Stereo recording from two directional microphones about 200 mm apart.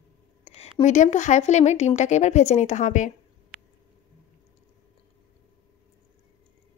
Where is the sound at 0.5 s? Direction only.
30° left (ahead or behind).